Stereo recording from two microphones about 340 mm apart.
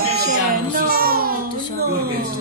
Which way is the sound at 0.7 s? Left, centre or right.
Right.